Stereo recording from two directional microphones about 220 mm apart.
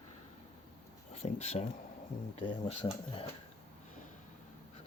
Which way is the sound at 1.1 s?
30° left (ahead or behind).